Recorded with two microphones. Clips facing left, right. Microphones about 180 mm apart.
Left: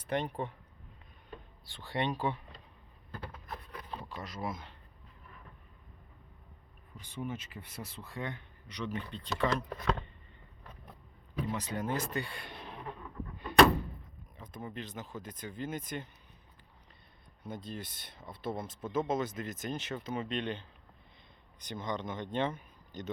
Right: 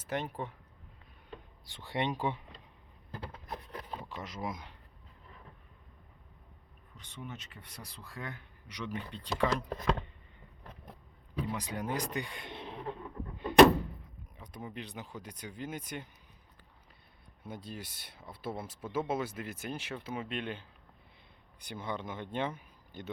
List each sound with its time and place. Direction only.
0.0 s a man's voice: 5° right (ahead or behind)
1.6 s speech: 20° right (ahead or behind)
3.1 s a sound: 15° right (ahead or behind)
4.2 s speech: 20° right (ahead or behind)
6.9 s a man's voice: 10° left (ahead or behind); by 9.6 s 10° right (ahead or behind)
11.5 s speech: 10° right (ahead or behind)
13.4 s door: 20° right (ahead or behind)
14.3 s speech: 15° right (ahead or behind)
17.4 s speech: 10° right (ahead or behind)